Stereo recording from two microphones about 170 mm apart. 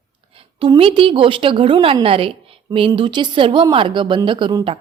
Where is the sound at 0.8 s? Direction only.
30° right (ahead or behind).